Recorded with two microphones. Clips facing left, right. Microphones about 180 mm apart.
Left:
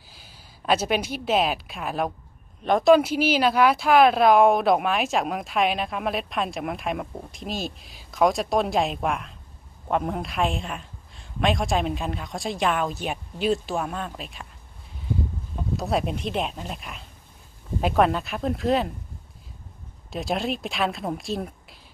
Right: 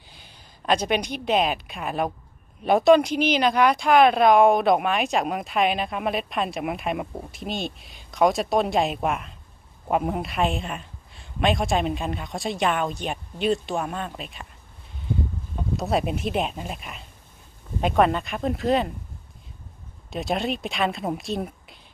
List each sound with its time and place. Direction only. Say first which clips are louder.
0.1 s a woman's voice: even; 5° left (ahead or behind)
15.7 s speech: right 1 dB; centre (ahead or behind)
20.1 s speech: right 1 dB; centre (ahead or behind)